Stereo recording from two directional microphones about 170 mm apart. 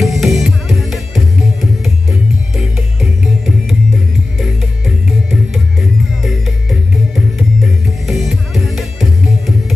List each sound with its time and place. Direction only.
0.0 s music: centre (ahead or behind)
4.4 s music: centre (ahead or behind)
6.2 s music: centre (ahead or behind)